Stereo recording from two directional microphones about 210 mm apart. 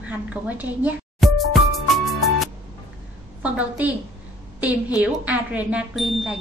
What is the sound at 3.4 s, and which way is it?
A woman's voice, 5° right (ahead or behind).